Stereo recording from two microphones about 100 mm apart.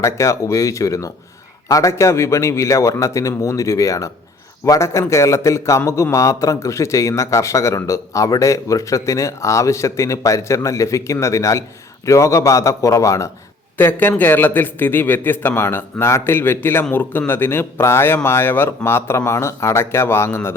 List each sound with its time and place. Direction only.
0.0 s a man's voice: 30° left (ahead or behind)
13.7 s speech: 20° left (ahead or behind)